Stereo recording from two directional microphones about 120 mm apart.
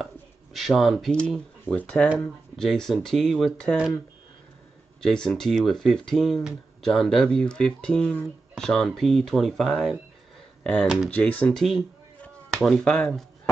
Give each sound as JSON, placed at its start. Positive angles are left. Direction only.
{"t": 0.0, "sound": "a sound", "side_deg": 0}
{"t": 1.1, "sound": "speech", "side_deg": 5}
{"t": 5.0, "sound": "speech", "side_deg": 5}
{"t": 12.2, "sound": "chop", "side_deg": 5}